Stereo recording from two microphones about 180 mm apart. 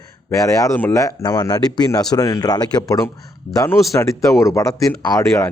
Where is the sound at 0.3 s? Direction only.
20° left (ahead or behind).